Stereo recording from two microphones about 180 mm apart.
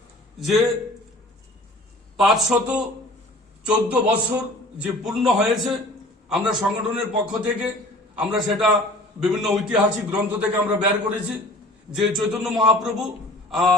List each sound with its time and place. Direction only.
0.3 s a man's voice: centre (ahead or behind)
2.1 s a man's voice: centre (ahead or behind)
11.9 s a man's voice: centre (ahead or behind)